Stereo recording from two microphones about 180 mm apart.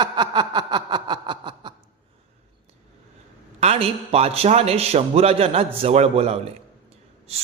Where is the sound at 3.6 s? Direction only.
35° right (ahead or behind).